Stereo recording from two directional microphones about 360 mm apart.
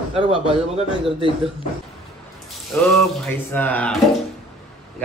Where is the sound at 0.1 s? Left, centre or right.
Centre.